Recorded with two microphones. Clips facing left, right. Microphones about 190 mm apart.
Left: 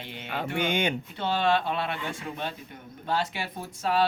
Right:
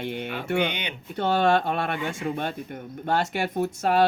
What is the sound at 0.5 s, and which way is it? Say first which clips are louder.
Speech: even; 45° left (ahead or behind).